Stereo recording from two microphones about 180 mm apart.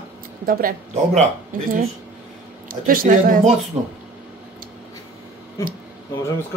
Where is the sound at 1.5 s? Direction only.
50° right (ahead or behind).